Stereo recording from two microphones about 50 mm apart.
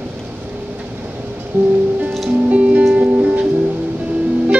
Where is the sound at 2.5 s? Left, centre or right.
Right.